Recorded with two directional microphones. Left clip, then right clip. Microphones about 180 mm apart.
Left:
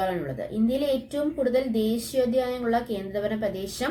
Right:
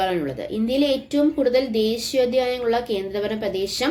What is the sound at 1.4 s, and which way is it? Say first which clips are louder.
A woman's voice: right 5 dB; 20° right (ahead or behind).